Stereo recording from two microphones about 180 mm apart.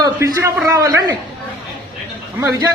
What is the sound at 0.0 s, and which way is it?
A man's voice, 15° right (ahead or behind).